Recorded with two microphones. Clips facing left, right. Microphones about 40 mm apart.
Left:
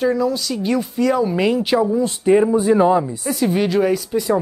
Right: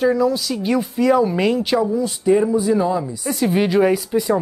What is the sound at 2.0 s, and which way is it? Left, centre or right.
Speech, left.